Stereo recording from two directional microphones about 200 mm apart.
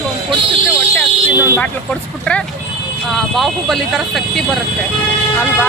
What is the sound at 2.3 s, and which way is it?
Speech, 5° left (ahead or behind).